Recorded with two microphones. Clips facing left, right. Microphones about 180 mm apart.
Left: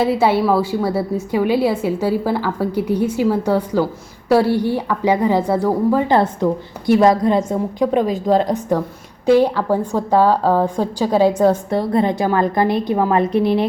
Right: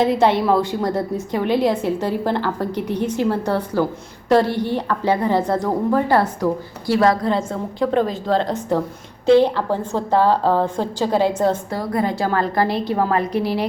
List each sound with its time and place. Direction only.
0.0 s a woman's voice: 5° left (ahead or behind)
11.8 s a woman's voice: 25° left (ahead or behind)